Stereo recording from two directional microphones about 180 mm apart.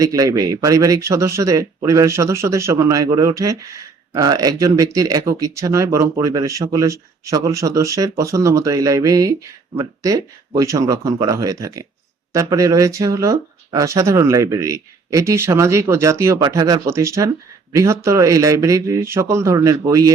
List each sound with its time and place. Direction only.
0.0 s speech: 20° right (ahead or behind)